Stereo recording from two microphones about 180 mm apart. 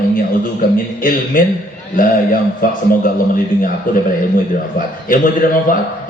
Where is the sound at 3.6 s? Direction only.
50° left (ahead or behind).